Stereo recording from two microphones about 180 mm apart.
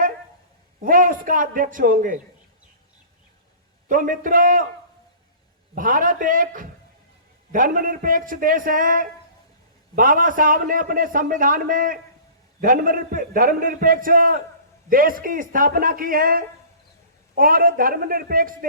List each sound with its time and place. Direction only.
0.8 s a man's voice: 50° right (ahead or behind)
3.8 s a man's voice: 50° right (ahead or behind)
5.7 s a man's voice: 50° right (ahead or behind)